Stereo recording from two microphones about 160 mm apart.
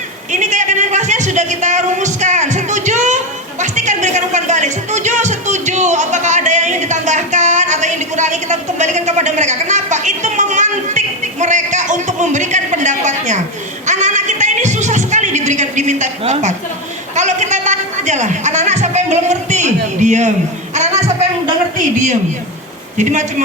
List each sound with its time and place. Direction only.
0.3 s speech: 50° right (ahead or behind)
23.0 s speech: 50° right (ahead or behind)